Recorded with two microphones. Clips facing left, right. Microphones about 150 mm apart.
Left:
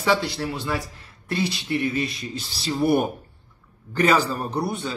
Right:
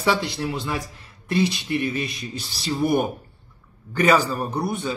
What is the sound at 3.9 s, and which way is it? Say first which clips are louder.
Speech: right 1 dB; 10° right (ahead or behind).